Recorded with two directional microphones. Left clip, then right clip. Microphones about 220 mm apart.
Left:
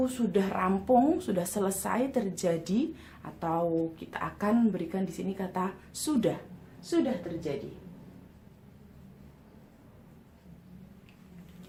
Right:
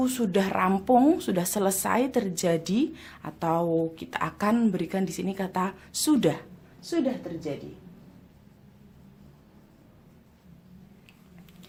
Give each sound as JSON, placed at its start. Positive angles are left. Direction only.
{"t": 0.0, "sound": "speech", "side_deg": -40}